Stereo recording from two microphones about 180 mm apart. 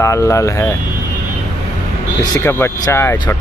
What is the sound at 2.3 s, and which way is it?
Speech, 15° left (ahead or behind).